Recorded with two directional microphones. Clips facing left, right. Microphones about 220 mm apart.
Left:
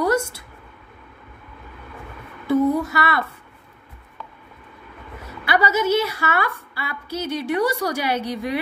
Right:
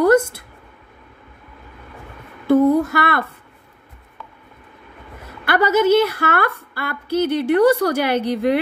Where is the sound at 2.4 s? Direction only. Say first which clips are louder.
Right 5 dB; 55° right (ahead or behind).